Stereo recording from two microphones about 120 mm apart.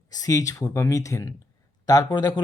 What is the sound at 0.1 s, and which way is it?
A man's voice, 30° left (ahead or behind).